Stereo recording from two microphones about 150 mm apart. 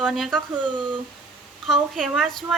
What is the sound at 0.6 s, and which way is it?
Speech, 30° right (ahead or behind).